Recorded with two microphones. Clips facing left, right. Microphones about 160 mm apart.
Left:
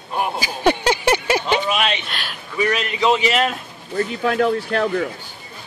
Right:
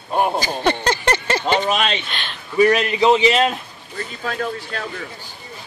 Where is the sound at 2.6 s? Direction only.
30° right (ahead or behind).